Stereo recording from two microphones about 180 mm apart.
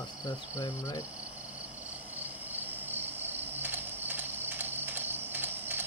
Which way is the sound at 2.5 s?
10° right (ahead or behind).